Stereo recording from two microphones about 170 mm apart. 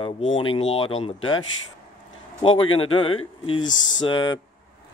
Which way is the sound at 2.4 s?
30° left (ahead or behind).